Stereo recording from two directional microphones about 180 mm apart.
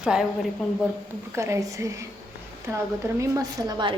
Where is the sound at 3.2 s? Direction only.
20° right (ahead or behind).